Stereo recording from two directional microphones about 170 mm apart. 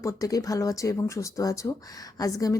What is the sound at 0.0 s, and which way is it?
A woman's voice, 20° left (ahead or behind).